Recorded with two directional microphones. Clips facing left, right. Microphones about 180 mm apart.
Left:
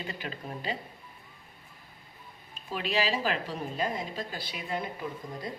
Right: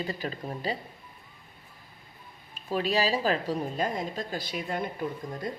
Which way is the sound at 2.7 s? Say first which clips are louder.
Right 3 dB; 40° right (ahead or behind).